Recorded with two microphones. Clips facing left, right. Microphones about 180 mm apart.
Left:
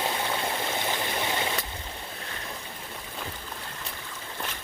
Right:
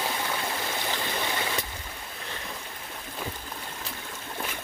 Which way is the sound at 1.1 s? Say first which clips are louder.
Left 1 dB; 20° left (ahead or behind).